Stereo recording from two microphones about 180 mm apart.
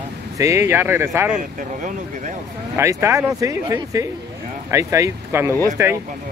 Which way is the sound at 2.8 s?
15° right (ahead or behind).